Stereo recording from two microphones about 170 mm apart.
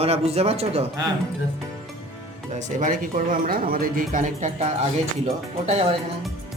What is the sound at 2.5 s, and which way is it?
Speech, 50° right (ahead or behind).